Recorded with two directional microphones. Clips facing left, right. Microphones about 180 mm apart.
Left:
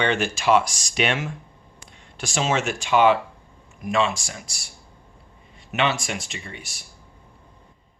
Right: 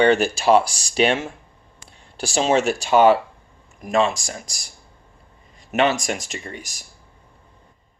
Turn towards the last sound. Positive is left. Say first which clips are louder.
# right 4 dB
turn(degrees=-40)  # may be behind; listen again after turning